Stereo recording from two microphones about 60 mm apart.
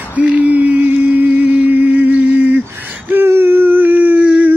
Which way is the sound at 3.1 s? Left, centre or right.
Right.